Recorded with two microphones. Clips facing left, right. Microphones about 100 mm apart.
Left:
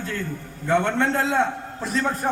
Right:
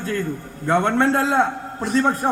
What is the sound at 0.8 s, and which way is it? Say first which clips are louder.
Speech: right 4 dB; 50° right (ahead or behind).